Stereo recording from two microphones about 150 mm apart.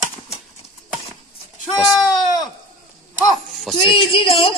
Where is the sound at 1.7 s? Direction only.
Centre (ahead or behind).